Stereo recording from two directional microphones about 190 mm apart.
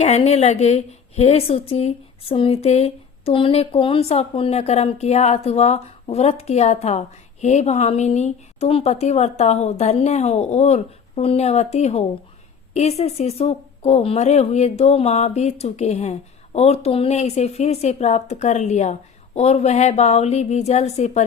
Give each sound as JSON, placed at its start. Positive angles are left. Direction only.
{"t": 0.0, "sound": "a woman's voice", "side_deg": 35}